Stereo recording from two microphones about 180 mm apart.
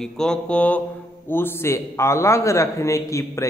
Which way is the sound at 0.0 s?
5° left (ahead or behind).